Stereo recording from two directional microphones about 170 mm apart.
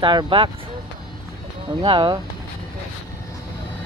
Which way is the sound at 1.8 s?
30° right (ahead or behind).